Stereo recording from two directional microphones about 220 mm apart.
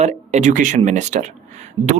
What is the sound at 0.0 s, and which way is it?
Speech, 30° right (ahead or behind).